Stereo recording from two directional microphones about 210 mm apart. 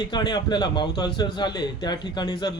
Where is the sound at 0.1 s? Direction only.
20° left (ahead or behind).